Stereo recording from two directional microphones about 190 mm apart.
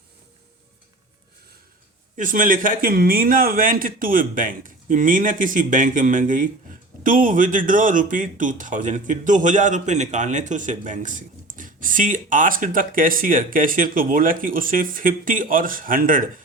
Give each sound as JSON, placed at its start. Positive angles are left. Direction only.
{"t": 2.1, "sound": "speech", "side_deg": -45}